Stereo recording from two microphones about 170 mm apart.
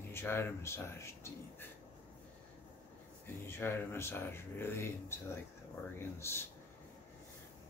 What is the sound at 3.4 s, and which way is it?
Speech, 15° left (ahead or behind).